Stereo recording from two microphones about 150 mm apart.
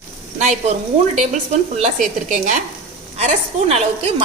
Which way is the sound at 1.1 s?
55° right (ahead or behind).